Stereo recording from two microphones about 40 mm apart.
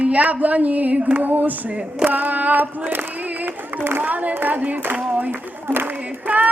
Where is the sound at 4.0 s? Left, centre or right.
Right.